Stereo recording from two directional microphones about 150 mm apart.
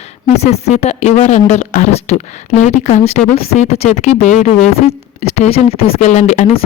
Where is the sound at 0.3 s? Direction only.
45° left (ahead or behind).